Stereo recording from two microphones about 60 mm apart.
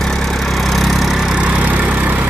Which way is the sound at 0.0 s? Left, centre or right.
Centre.